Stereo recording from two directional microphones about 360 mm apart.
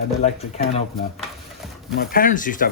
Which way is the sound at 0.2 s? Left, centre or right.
Centre.